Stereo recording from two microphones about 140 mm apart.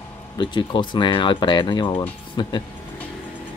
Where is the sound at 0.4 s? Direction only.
35° left (ahead or behind).